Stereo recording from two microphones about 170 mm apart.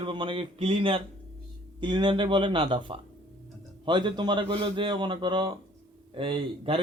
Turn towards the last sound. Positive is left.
turn(degrees=-35)  # may be behind; listen again after turning